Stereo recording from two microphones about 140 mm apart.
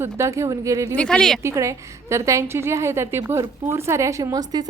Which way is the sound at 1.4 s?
20° right (ahead or behind).